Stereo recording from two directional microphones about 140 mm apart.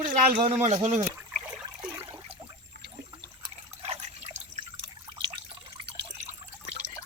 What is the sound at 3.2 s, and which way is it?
Water, 40° right (ahead or behind).